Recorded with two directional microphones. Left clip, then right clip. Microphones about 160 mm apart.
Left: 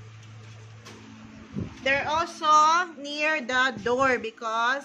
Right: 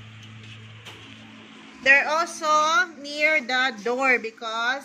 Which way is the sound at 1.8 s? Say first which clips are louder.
Right 6 dB; centre (ahead or behind).